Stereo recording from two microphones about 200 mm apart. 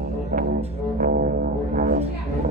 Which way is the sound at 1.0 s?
45° right (ahead or behind).